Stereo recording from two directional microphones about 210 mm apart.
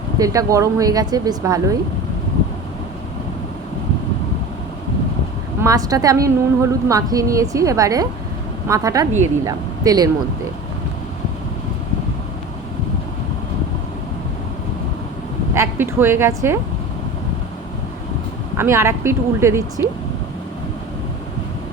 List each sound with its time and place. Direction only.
0.2 s a woman's voice: 15° right (ahead or behind)
5.6 s a woman's voice: 15° right (ahead or behind)
15.5 s a woman's voice: 10° right (ahead or behind)
18.5 s a woman's voice: 10° right (ahead or behind)